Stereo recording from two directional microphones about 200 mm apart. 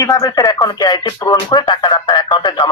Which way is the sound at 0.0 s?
20° left (ahead or behind).